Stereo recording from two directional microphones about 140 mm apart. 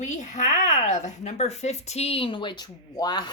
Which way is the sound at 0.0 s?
60° left (ahead or behind).